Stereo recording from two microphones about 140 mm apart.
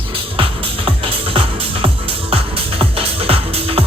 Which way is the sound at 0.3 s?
40° right (ahead or behind).